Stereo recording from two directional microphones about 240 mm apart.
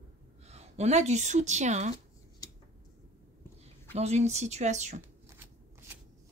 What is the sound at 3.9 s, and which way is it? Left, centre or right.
Speech, right.